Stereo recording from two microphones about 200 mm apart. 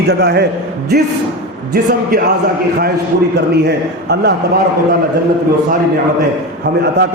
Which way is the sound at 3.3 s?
55° right (ahead or behind).